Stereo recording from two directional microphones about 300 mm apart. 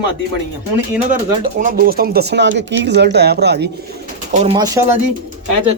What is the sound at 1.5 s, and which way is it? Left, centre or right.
Speech, right.